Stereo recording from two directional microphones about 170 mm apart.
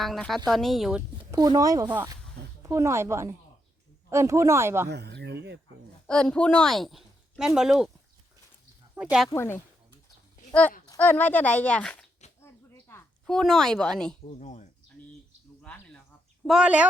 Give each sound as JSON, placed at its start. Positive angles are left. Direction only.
{"t": 0.0, "sound": "a woman's voice", "side_deg": 0}
{"t": 1.2, "sound": "speech", "side_deg": -20}
{"t": 4.9, "sound": "speech", "side_deg": -80}
{"t": 6.1, "sound": "speech", "side_deg": 5}
{"t": 9.0, "sound": "a woman's voice", "side_deg": -5}
{"t": 9.3, "sound": "speech", "side_deg": 15}
{"t": 12.4, "sound": "a sound", "side_deg": 15}
{"t": 13.2, "sound": "a woman's voice", "side_deg": 0}
{"t": 14.3, "sound": "speech", "side_deg": 45}
{"t": 15.7, "sound": "insect", "side_deg": 5}
{"t": 16.4, "sound": "speech", "side_deg": -5}